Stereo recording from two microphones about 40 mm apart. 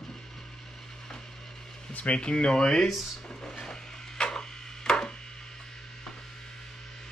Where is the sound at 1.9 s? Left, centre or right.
Left.